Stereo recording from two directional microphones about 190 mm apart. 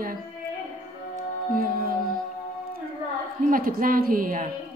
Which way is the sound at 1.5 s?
50° right (ahead or behind).